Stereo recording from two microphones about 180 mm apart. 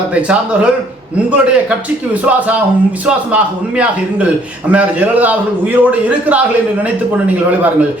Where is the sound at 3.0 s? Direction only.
10° right (ahead or behind).